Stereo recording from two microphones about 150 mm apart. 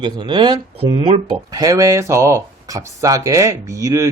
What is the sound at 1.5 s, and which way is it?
Speech, 25° right (ahead or behind).